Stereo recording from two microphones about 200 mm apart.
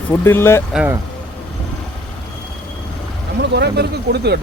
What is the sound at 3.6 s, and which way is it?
Speech, 55° right (ahead or behind).